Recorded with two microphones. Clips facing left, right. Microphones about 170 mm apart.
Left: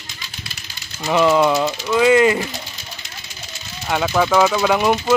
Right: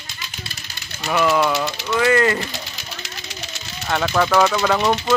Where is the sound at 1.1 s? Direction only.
20° left (ahead or behind).